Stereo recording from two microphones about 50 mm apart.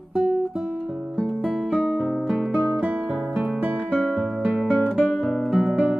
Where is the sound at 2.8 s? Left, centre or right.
Right.